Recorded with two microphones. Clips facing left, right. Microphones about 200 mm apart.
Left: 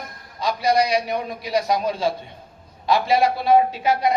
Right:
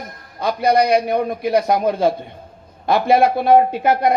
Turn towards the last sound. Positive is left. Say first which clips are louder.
# right 4 dB
turn(degrees=-55)  # may be behind; listen again after turning